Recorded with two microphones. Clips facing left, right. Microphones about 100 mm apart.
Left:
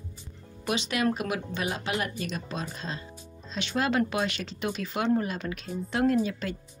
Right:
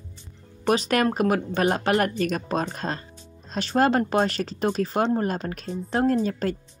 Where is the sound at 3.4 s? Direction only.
45° right (ahead or behind).